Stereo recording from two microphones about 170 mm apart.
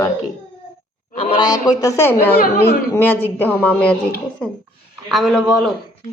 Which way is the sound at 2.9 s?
10° left (ahead or behind).